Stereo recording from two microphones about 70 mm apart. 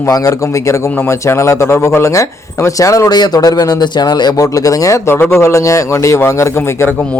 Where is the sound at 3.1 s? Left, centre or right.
Left.